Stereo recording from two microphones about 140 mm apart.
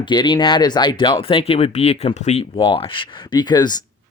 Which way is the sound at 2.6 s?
40° left (ahead or behind).